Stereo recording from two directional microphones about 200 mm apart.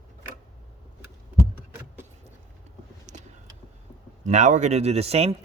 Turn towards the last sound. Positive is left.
turn(degrees=-30)  # may be behind; listen again after turning